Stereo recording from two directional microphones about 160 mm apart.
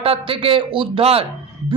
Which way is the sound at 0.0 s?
35° right (ahead or behind).